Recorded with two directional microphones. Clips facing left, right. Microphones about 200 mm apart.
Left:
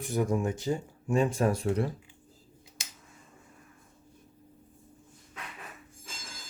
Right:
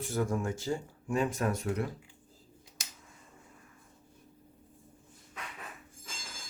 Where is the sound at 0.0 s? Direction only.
15° left (ahead or behind).